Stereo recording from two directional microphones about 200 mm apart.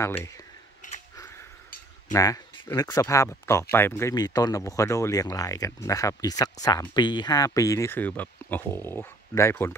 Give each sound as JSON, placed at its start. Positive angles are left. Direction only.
{"t": 0.0, "sound": "speech", "side_deg": 15}
{"t": 2.1, "sound": "speech", "side_deg": 15}